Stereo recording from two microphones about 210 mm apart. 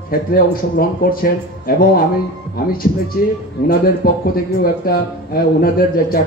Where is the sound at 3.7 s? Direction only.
45° left (ahead or behind).